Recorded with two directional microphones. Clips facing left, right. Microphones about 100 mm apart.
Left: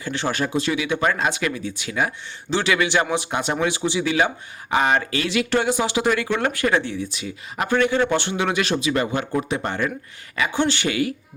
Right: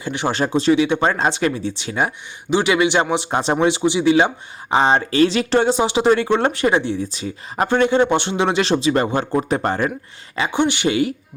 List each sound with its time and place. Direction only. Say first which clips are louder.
0.0 s speech: right 3 dB; 20° right (ahead or behind)
7.0 s speech: right 3 dB; 35° right (ahead or behind)
10.6 s speech: right 4 dB; 20° right (ahead or behind)